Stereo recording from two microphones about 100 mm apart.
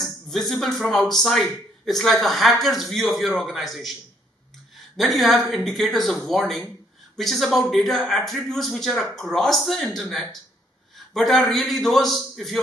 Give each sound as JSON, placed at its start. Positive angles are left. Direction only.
{"t": 0.3, "sound": "a man's voice", "side_deg": 0}
{"t": 4.9, "sound": "a man's voice", "side_deg": 0}